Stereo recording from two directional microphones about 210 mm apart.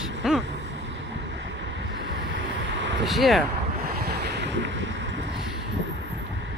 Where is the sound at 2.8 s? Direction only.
60° right (ahead or behind).